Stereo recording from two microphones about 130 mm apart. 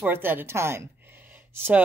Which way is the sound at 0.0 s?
15° right (ahead or behind).